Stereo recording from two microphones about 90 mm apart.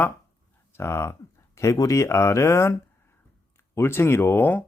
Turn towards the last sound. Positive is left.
turn(degrees=20)  # may be behind; listen again after turning